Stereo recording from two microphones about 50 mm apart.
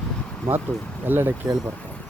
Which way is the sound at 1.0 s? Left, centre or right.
Right.